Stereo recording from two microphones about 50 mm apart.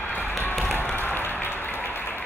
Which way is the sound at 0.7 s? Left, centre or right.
Left.